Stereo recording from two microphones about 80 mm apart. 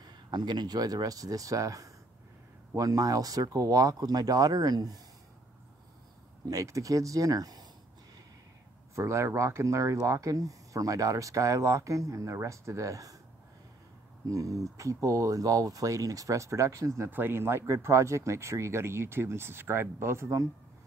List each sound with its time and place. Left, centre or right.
0.0 s speech: right
6.5 s speech: right
8.9 s speech: right
14.3 s speech: right
17.1 s speech: right